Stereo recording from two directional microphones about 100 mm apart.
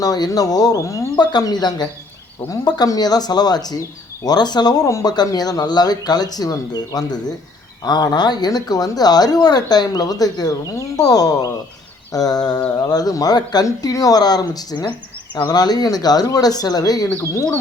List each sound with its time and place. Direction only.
0.0 s speech: 40° left (ahead or behind)
1.2 s speech: 40° left (ahead or behind)
4.9 s speech: 30° left (ahead or behind)
5.1 s speech: 40° left (ahead or behind)